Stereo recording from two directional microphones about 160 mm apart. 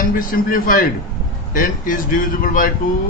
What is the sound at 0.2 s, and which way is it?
A man's voice, 60° left (ahead or behind).